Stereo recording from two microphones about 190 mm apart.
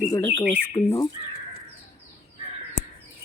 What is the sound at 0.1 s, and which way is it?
Speech, 15° left (ahead or behind).